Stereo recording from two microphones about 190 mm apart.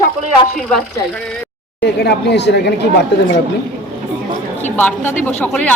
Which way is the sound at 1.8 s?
65° left (ahead or behind).